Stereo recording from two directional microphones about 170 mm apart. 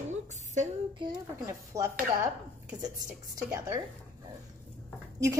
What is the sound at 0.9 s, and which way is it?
Speech, 25° right (ahead or behind).